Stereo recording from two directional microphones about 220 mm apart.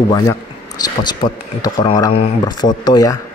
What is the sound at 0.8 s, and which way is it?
Speech, 20° left (ahead or behind).